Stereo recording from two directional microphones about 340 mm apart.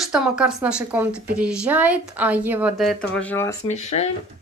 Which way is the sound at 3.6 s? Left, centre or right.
Centre.